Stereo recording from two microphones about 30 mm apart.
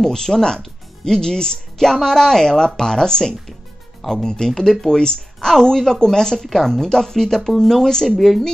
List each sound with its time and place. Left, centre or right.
0.0 s speech: centre
8.2 s a woman's voice: centre